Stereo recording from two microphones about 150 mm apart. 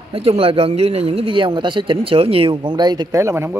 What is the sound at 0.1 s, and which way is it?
Speech, 40° right (ahead or behind).